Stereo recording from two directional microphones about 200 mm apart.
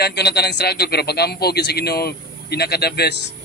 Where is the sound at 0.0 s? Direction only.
55° left (ahead or behind).